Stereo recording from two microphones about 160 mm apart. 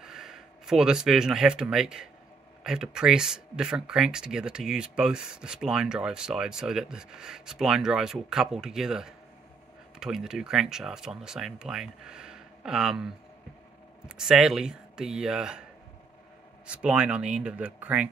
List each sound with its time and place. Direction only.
0.0 s speech: centre (ahead or behind)
16.6 s speech: 5° right (ahead or behind)